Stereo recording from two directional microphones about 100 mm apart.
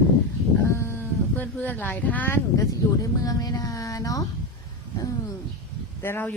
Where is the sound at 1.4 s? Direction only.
15° left (ahead or behind).